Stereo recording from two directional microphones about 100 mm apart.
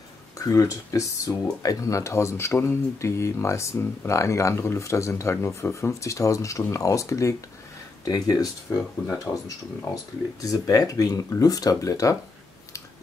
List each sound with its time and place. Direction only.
0.4 s speech: 35° left (ahead or behind)
10.4 s speech: 35° left (ahead or behind)